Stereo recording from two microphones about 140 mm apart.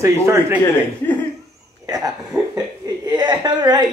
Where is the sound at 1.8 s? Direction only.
25° right (ahead or behind).